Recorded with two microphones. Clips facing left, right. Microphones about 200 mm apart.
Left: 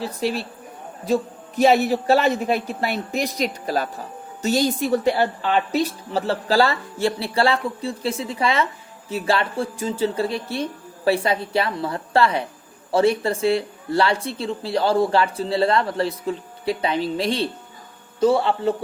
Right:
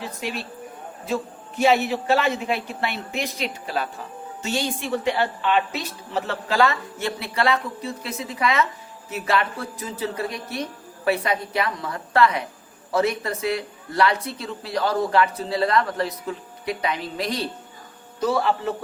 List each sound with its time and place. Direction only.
0.0 s speech: 35° left (ahead or behind)